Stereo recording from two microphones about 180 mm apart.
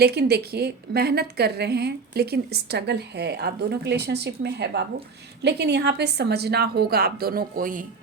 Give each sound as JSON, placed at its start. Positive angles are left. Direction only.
{"t": 0.0, "sound": "a woman's voice", "side_deg": -65}